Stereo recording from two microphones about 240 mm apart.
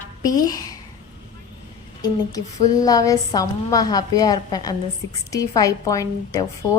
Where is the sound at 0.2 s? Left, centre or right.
Centre.